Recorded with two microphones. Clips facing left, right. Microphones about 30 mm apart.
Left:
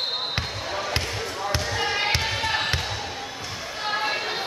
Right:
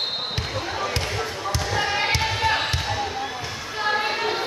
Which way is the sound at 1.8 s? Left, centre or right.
Centre.